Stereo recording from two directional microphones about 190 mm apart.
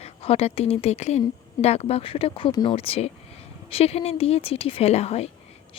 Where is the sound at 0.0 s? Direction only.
30° left (ahead or behind).